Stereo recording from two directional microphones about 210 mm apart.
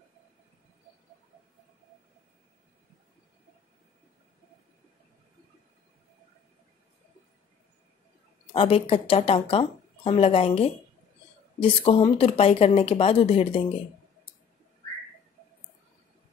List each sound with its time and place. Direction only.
8.5 s speech: 25° left (ahead or behind)